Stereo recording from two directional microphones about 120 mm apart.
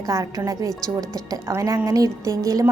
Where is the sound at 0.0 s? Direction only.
30° right (ahead or behind).